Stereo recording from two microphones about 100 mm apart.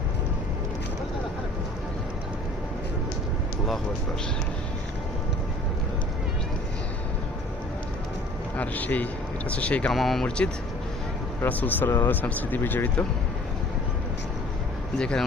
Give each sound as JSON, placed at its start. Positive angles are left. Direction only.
{"t": 8.5, "sound": "speech", "side_deg": 15}
{"t": 9.9, "sound": "speech", "side_deg": 0}
{"t": 14.9, "sound": "speech", "side_deg": 10}